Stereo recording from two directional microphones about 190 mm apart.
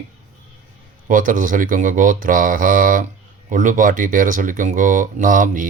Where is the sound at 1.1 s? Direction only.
45° right (ahead or behind).